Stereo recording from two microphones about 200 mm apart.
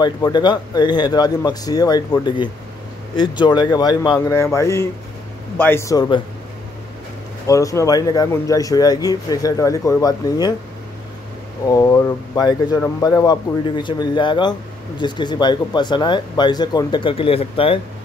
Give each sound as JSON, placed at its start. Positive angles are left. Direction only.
{"t": 0.0, "sound": "speech", "side_deg": 20}
{"t": 7.4, "sound": "speech", "side_deg": 15}
{"t": 11.6, "sound": "speech", "side_deg": 20}